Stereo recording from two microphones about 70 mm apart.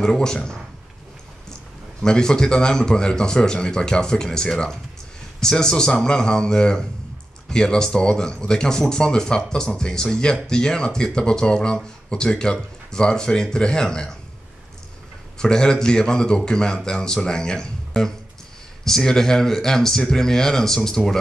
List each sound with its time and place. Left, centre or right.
0.0 s speech: centre
2.0 s speech: centre
15.3 s speech: centre